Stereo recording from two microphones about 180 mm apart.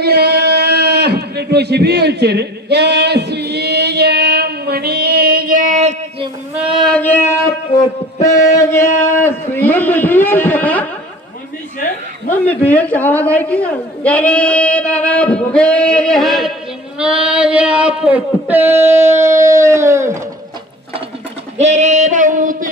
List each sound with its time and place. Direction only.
0.0 s a sound: 65° right (ahead or behind); by 6.2 s 40° right (ahead or behind)
6.9 s a woman's voice: 10° left (ahead or behind)
12.3 s a woman's voice: 10° left (ahead or behind); by 20.2 s 15° right (ahead or behind)
21.5 s music: 40° right (ahead or behind)